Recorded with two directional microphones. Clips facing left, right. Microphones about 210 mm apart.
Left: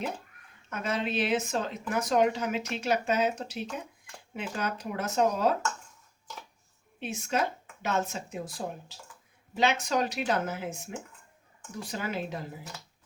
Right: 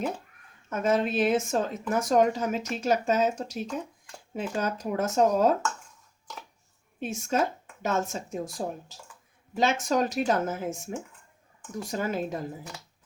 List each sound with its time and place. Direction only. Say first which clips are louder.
0.7 s speech: right 6 dB; 45° right (ahead or behind)
7.0 s speech: right 3 dB; 45° right (ahead or behind)
11.8 s speech: right 4 dB; 45° right (ahead or behind)